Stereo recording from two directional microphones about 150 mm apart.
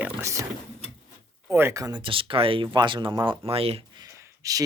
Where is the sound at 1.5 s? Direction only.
15° right (ahead or behind).